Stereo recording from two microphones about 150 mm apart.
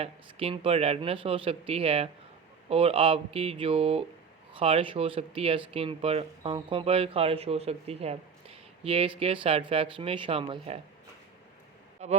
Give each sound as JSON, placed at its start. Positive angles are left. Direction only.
{"t": 0.0, "sound": "speech", "side_deg": -40}
{"t": 12.0, "sound": "speech", "side_deg": -50}